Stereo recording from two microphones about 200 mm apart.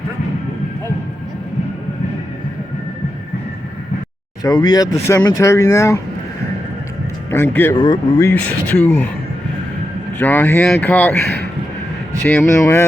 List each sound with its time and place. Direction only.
4.4 s speech: 20° left (ahead or behind)
7.3 s speech: 10° left (ahead or behind)
10.2 s speech: 10° left (ahead or behind)
12.2 s speech: 5° left (ahead or behind)
12.5 s speech: 15° left (ahead or behind)